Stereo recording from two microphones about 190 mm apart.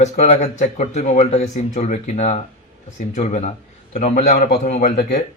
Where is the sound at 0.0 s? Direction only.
35° left (ahead or behind).